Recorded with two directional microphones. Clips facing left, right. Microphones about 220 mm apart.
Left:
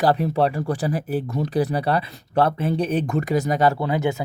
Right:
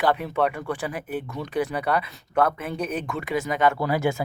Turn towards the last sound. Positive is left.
turn(degrees=20)  # may be behind; listen again after turning